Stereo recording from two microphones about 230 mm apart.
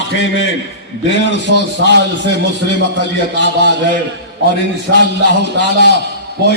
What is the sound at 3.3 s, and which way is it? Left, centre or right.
Speech, right.